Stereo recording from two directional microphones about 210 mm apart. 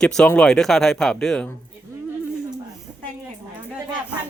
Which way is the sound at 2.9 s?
15° right (ahead or behind).